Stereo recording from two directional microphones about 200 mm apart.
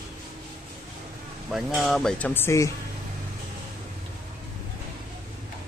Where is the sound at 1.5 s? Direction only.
Centre (ahead or behind).